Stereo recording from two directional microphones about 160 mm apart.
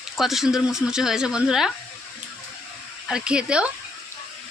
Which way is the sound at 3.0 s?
5° right (ahead or behind).